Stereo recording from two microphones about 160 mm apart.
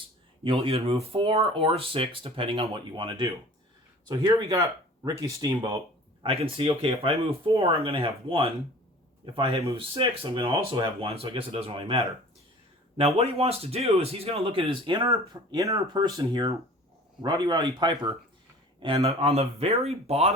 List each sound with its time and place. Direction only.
0.4 s speech: 35° right (ahead or behind)
6.2 s speech: 35° right (ahead or behind)
13.1 s speech: 40° right (ahead or behind); by 18.2 s 25° right (ahead or behind)
18.8 s speech: 35° right (ahead or behind)